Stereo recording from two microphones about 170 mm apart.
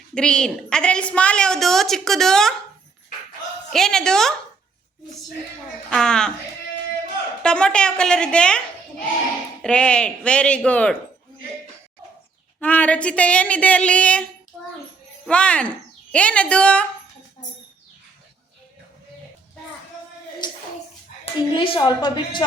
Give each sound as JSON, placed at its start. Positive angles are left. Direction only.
{"t": 0.1, "sound": "a woman's voice", "side_deg": 5}
{"t": 3.7, "sound": "a woman's voice", "side_deg": 5}
{"t": 5.9, "sound": "a woman's voice", "side_deg": 5}
{"t": 7.4, "sound": "a woman's voice", "side_deg": 5}
{"t": 12.5, "sound": "speech", "side_deg": 10}
{"t": 15.3, "sound": "speech", "side_deg": 5}
{"t": 20.4, "sound": "a sound", "side_deg": 25}
{"t": 21.5, "sound": "a woman's voice", "side_deg": 25}